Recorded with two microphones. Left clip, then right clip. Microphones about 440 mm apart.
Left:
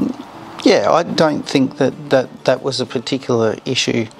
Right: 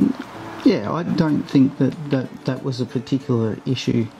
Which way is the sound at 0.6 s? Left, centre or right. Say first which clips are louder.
Left 8 dB; left.